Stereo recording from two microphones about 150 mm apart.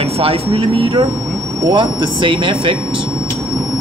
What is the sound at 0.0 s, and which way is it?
A man's voice, 40° right (ahead or behind).